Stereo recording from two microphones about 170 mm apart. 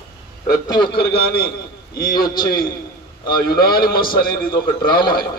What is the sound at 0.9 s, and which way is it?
A man's voice, 65° left (ahead or behind).